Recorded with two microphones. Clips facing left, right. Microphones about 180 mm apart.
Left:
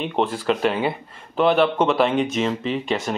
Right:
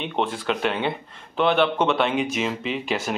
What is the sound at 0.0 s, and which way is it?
Speech, centre (ahead or behind).